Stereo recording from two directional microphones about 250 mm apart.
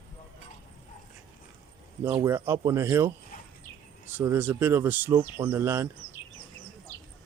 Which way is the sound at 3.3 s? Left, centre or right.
Left.